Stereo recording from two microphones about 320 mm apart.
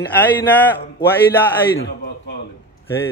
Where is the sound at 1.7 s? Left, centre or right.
Left.